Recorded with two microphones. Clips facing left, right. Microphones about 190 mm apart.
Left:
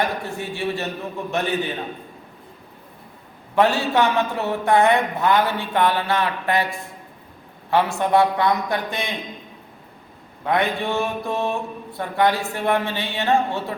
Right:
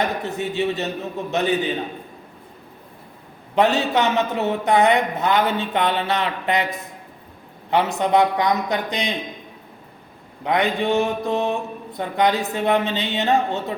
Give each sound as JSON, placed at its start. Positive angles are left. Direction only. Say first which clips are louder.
{"t": 0.0, "sound": "speech", "louder": "right 1 dB", "side_deg": -20}
{"t": 3.5, "sound": "speech", "louder": "even", "side_deg": -20}
{"t": 10.4, "sound": "speech", "louder": "right 1 dB", "side_deg": -15}